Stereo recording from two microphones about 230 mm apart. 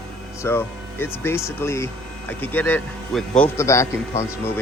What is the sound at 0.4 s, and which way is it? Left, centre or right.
Speech, centre.